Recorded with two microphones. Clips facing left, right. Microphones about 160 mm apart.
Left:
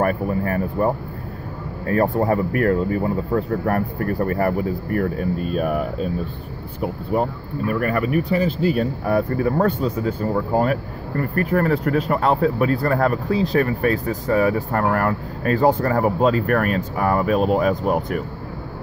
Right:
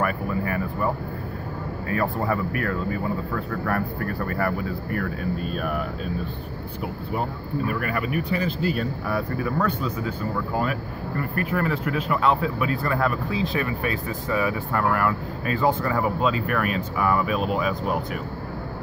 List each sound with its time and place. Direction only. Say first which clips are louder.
0.0 s speech: left 5 dB; 40° left (ahead or behind)
7.8 s speech: left 6 dB; 40° left (ahead or behind)